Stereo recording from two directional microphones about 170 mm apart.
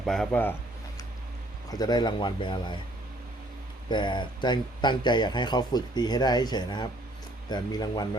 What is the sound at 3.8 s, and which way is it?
Speech, 25° left (ahead or behind).